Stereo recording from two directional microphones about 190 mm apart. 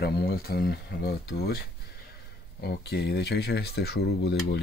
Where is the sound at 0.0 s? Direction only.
55° left (ahead or behind).